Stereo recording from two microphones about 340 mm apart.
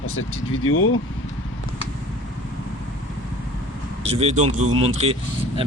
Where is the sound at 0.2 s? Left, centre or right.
Left.